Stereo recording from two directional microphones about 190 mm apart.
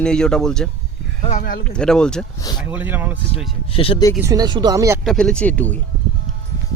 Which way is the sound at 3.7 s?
30° left (ahead or behind).